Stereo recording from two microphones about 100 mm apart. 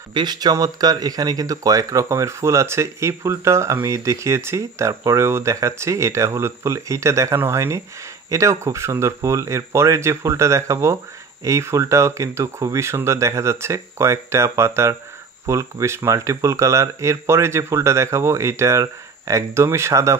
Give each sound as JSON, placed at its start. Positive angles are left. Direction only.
{"t": 0.1, "sound": "speech", "side_deg": -45}